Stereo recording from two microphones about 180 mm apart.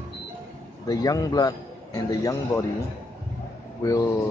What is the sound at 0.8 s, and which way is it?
Speech, 20° left (ahead or behind).